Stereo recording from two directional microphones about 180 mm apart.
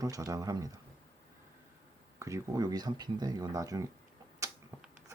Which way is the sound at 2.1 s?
15° right (ahead or behind).